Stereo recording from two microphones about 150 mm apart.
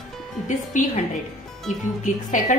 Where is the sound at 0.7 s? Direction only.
55° left (ahead or behind).